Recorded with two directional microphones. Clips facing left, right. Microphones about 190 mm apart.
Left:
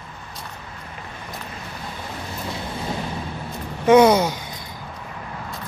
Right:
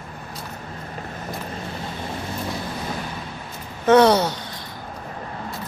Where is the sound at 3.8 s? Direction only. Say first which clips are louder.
Left 1 dB; 10° left (ahead or behind).